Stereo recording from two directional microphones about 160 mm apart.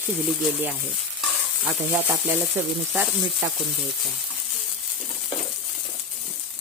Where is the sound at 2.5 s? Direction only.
10° right (ahead or behind).